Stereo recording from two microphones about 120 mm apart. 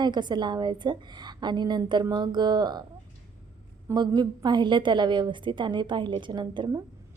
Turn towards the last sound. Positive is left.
turn(degrees=-35)  # may be behind; listen again after turning